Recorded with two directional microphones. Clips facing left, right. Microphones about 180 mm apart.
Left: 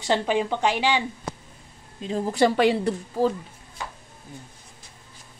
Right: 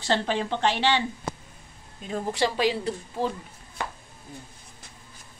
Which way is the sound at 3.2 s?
40° left (ahead or behind).